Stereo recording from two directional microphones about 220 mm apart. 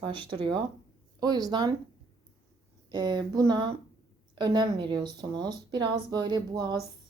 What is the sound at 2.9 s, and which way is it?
Speech, 20° right (ahead or behind).